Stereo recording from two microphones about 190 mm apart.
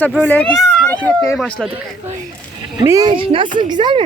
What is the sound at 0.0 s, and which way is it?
Speech, 10° left (ahead or behind).